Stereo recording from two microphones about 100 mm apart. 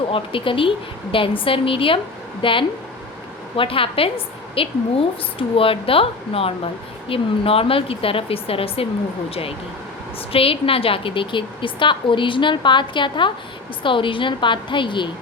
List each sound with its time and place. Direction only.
0.1 s a woman's voice: 60° left (ahead or behind)